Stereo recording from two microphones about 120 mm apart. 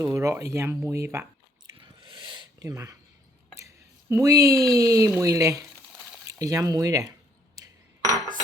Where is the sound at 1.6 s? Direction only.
40° right (ahead or behind).